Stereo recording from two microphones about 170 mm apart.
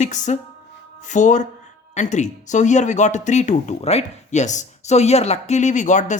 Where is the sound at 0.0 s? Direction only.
45° left (ahead or behind).